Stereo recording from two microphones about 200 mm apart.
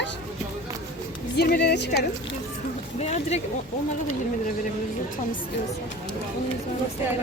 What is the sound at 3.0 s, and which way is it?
Speech, 35° left (ahead or behind).